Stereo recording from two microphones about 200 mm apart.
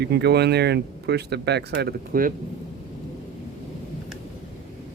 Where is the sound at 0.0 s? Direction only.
55° right (ahead or behind).